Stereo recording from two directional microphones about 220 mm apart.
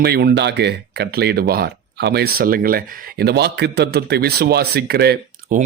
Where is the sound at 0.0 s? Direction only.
45° right (ahead or behind).